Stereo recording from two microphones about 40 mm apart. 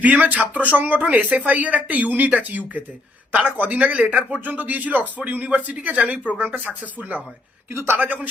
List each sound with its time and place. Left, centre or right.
0.0 s speech: right
7.7 s a woman's voice: right
7.9 s speech: right